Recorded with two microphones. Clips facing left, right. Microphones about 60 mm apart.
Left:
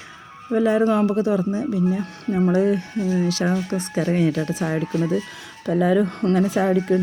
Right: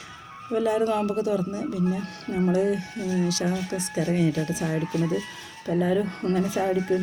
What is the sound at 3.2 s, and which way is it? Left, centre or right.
Speech, left.